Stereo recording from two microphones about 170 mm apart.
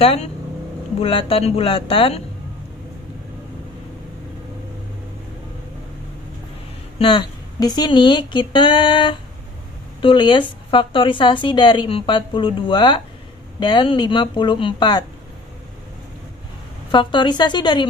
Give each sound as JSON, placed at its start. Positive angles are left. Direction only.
{"t": 0.0, "sound": "speech", "side_deg": 35}
{"t": 7.0, "sound": "speech", "side_deg": 30}
{"t": 16.9, "sound": "speech", "side_deg": 30}